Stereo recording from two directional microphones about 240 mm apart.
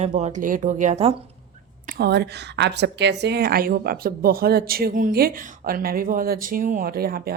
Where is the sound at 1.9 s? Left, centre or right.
Right.